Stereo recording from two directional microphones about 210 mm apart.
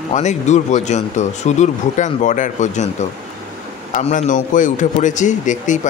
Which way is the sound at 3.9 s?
35° left (ahead or behind).